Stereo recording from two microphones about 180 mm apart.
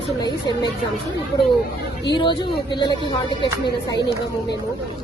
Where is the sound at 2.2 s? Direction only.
25° left (ahead or behind).